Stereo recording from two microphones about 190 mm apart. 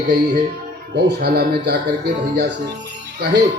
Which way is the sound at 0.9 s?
60° right (ahead or behind).